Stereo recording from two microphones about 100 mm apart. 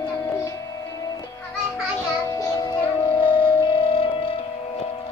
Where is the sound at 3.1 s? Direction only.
55° left (ahead or behind).